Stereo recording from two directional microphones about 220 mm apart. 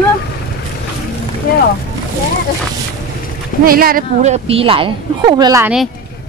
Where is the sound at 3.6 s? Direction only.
40° right (ahead or behind); by 5.7 s 15° right (ahead or behind).